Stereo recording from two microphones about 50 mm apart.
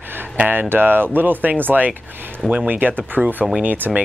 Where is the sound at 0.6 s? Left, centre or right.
Right.